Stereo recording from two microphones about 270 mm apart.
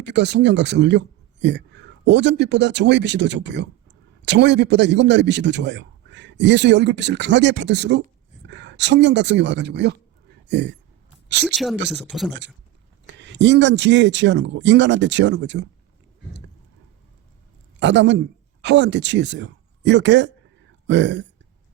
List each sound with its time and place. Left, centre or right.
0.0 s speech: right
11.4 s speech: centre
13.1 s speech: right
17.7 s a man's voice: right